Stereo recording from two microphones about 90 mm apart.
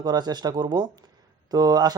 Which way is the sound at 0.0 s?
50° right (ahead or behind).